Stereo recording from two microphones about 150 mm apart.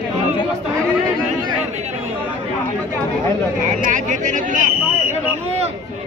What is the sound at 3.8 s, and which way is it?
Speech, 55° right (ahead or behind).